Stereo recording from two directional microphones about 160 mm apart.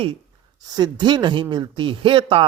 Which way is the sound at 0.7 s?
25° right (ahead or behind).